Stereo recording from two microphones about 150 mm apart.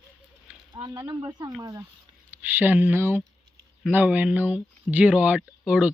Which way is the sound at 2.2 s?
10° right (ahead or behind).